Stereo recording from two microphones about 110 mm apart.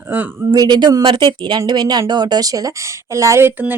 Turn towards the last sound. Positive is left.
turn(degrees=-20)  # may be behind; listen again after turning